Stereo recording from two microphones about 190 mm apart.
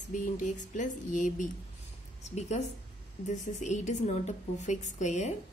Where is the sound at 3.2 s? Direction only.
40° left (ahead or behind).